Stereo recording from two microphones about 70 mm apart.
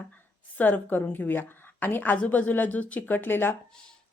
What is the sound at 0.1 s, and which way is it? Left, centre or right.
A woman's voice, left.